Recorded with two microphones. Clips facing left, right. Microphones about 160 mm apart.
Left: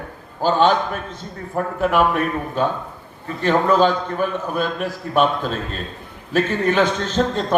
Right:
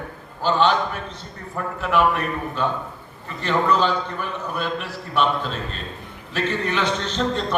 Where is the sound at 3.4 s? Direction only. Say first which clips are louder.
Left 4 dB; 50° left (ahead or behind).